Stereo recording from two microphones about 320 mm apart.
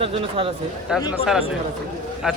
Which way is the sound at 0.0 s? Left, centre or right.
Centre.